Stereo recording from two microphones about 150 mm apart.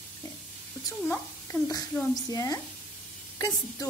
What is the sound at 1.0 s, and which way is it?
A child's voice, 15° left (ahead or behind).